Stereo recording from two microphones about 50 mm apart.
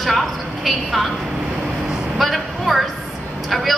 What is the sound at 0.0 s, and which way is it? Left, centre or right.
A woman's voice, centre.